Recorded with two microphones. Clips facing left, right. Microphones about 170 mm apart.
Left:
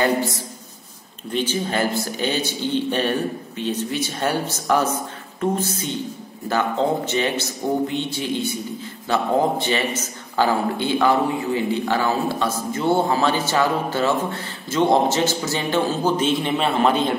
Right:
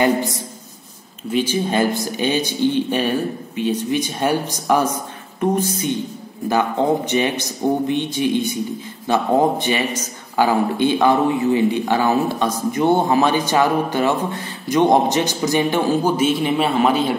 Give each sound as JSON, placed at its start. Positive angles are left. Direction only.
{"t": 0.0, "sound": "a man's voice", "side_deg": -15}
{"t": 7.1, "sound": "a man's voice", "side_deg": -15}